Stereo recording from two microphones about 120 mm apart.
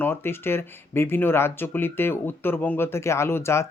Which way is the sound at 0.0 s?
20° left (ahead or behind).